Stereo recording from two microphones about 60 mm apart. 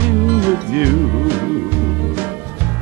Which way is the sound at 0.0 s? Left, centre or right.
Right.